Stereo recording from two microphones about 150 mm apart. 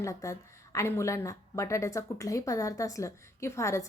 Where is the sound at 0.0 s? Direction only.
20° left (ahead or behind).